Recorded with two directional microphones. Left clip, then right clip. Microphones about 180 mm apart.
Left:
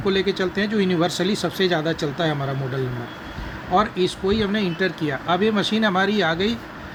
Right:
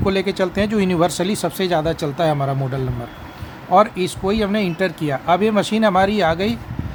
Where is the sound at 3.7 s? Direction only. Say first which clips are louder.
Right 5 dB; 45° right (ahead or behind).